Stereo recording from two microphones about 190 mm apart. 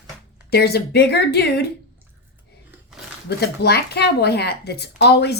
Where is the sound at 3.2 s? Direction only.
55° left (ahead or behind).